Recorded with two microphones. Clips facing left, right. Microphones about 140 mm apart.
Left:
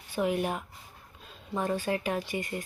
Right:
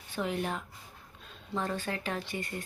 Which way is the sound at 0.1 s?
15° left (ahead or behind).